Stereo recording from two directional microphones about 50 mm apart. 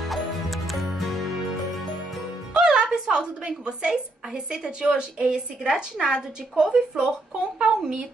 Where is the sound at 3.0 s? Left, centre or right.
Centre.